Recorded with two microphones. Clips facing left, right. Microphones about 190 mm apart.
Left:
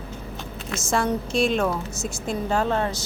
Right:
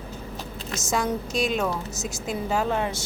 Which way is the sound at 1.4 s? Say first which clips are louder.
Left 3 dB; 5° right (ahead or behind).